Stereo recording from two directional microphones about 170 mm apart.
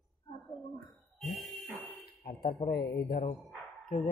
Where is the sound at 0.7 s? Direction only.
Centre (ahead or behind).